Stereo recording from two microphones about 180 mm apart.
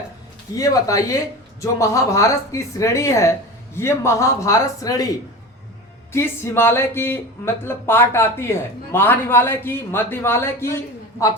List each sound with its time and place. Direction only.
0.5 s speech: 20° left (ahead or behind)
6.1 s speech: 15° left (ahead or behind)